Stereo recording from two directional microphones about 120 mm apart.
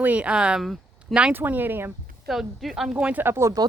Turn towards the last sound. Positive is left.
turn(degrees=-25)  # may be behind; listen again after turning